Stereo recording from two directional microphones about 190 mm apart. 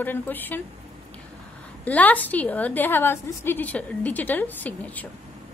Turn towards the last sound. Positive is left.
turn(degrees=10)  # may be behind; listen again after turning